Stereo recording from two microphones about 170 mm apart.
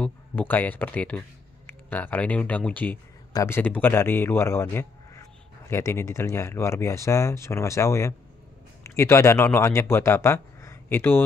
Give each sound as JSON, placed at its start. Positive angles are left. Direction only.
{"t": 0.0, "sound": "a man's voice", "side_deg": 10}